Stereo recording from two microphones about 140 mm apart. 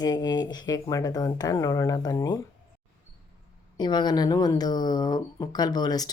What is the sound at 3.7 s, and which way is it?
Speech, 30° left (ahead or behind).